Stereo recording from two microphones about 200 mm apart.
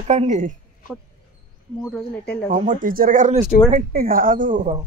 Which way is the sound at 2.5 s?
35° right (ahead or behind).